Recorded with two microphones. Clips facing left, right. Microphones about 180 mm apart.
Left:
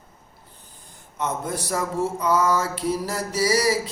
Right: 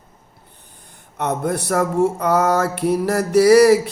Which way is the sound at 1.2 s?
65° right (ahead or behind).